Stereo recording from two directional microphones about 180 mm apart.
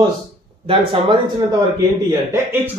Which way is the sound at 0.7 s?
30° right (ahead or behind).